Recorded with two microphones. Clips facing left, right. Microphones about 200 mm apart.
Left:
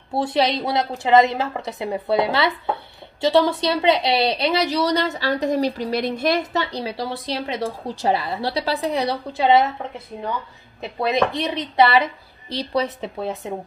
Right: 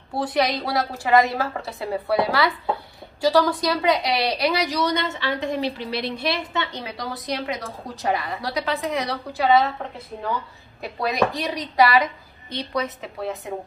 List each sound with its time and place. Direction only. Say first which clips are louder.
0.1 s a woman's voice: left 2 dB; 25° left (ahead or behind)
10.8 s a woman's voice: left 2 dB; 25° left (ahead or behind)